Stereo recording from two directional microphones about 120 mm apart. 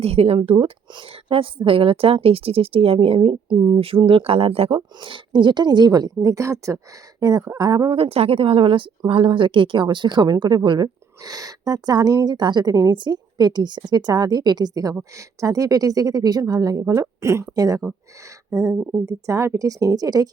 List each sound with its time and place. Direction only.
0.0 s a woman's voice: 55° right (ahead or behind); by 7.9 s 35° right (ahead or behind)
7.9 s a woman's voice: 55° right (ahead or behind); by 20.3 s 30° right (ahead or behind)